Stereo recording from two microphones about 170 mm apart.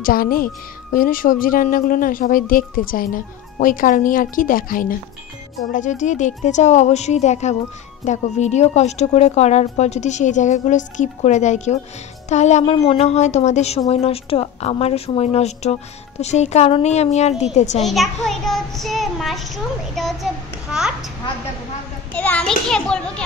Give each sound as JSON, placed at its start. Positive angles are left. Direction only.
{"t": 0.0, "sound": "a woman's voice", "side_deg": 60}
{"t": 17.8, "sound": "a child's voice", "side_deg": 0}
{"t": 22.1, "sound": "a child's voice", "side_deg": 10}